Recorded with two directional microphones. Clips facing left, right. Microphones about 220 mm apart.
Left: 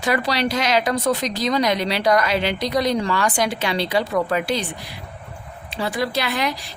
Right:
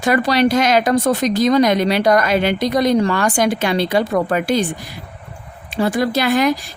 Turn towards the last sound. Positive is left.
turn(degrees=-50)  # may be behind; listen again after turning